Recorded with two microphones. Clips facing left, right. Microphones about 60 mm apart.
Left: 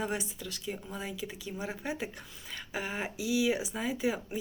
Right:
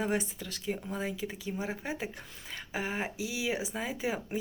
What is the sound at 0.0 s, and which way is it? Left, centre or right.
Speech, right.